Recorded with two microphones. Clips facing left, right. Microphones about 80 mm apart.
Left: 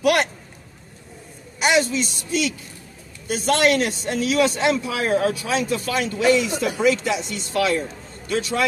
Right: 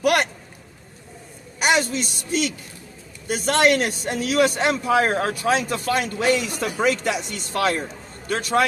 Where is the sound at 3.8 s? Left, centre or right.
Right.